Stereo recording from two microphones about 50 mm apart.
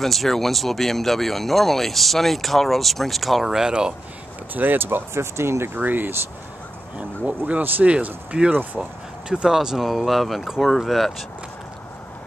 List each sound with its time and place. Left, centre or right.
0.0 s speech: centre
4.6 s speech: right
5.8 s speech: right
7.2 s speech: right
8.8 s speech: centre